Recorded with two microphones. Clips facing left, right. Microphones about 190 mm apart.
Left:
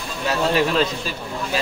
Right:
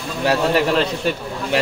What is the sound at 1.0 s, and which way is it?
Speech, 65° right (ahead or behind).